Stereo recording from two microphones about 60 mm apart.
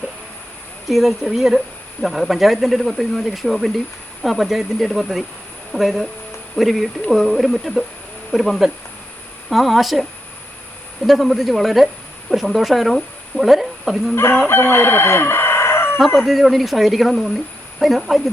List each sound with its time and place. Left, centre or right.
0.9 s speech: centre
14.4 s crowing: left
16.1 s speech: centre